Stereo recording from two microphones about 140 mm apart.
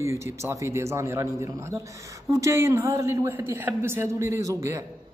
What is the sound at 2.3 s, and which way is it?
Speech, 20° right (ahead or behind).